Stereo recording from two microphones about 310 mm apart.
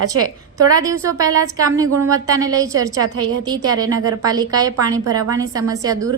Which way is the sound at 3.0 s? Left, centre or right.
Right.